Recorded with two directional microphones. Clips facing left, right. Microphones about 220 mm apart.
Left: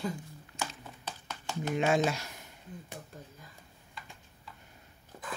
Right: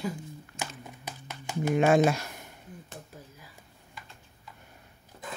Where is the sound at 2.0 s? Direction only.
55° right (ahead or behind).